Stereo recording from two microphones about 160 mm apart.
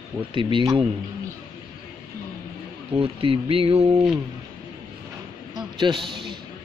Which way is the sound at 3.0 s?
35° right (ahead or behind).